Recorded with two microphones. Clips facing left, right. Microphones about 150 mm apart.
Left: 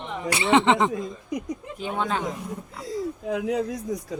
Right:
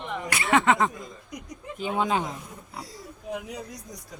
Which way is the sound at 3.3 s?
90° left.